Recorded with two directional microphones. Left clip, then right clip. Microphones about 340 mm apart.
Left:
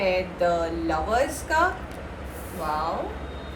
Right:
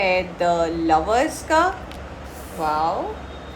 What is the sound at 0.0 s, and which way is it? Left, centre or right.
A woman's voice, centre.